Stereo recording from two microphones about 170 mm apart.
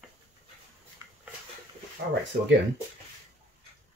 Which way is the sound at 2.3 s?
60° right (ahead or behind).